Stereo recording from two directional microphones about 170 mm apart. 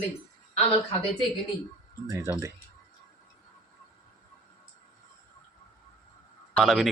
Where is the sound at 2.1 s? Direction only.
15° right (ahead or behind).